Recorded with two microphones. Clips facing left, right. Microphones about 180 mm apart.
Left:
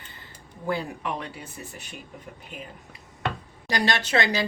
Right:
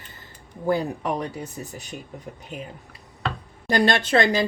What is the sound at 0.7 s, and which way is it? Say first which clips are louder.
Speech: right 5 dB; 40° right (ahead or behind).